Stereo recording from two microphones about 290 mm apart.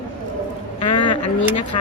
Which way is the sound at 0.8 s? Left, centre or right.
Left.